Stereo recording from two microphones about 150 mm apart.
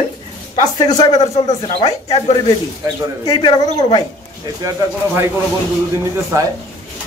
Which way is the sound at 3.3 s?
30° left (ahead or behind).